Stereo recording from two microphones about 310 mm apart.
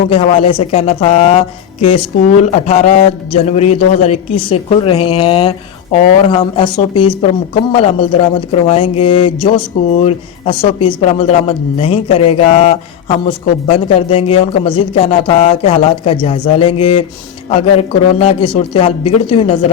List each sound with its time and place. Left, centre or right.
0.1 s speech: centre